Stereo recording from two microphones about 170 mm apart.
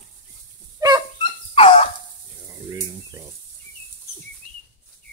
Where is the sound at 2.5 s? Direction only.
20° right (ahead or behind).